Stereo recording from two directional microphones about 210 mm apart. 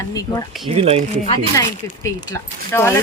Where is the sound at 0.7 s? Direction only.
30° right (ahead or behind).